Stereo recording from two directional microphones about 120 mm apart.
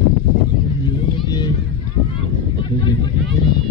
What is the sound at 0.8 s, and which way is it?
Vehicle, 35° left (ahead or behind).